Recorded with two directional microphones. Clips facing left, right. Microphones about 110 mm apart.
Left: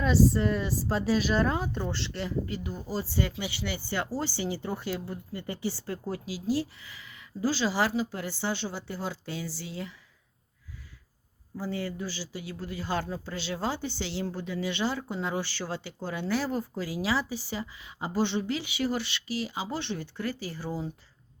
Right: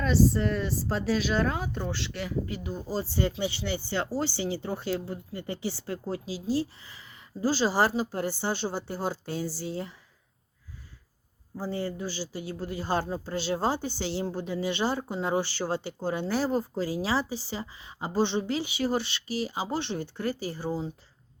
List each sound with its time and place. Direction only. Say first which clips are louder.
0.0 s speech: even; centre (ahead or behind)
2.7 s speech: right 2 dB; 25° right (ahead or behind)
11.5 s speech: right 1 dB; 30° right (ahead or behind)